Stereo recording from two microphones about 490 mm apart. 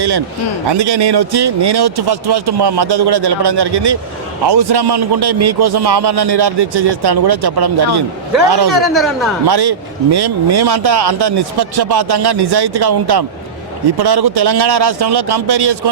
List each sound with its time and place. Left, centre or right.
0.7 s a man's voice: right
8.9 s a man's voice: centre
9.5 s a man's voice: right